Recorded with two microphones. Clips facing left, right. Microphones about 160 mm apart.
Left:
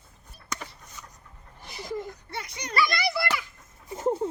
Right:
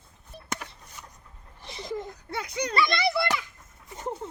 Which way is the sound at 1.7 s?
25° right (ahead or behind).